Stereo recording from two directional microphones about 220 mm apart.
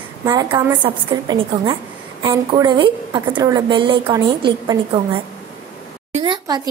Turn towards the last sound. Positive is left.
turn(degrees=-20)  # may be behind; listen again after turning